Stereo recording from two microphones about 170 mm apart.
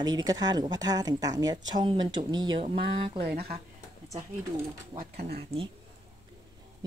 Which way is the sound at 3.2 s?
70° right (ahead or behind).